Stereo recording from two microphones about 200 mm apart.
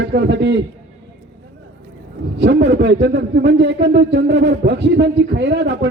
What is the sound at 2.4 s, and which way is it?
A man's voice, 60° right (ahead or behind).